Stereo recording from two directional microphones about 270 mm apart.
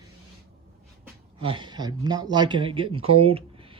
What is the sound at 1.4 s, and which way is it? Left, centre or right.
Speech, centre.